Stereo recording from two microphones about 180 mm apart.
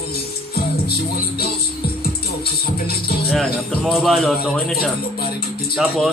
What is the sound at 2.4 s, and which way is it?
Music, 60° left (ahead or behind).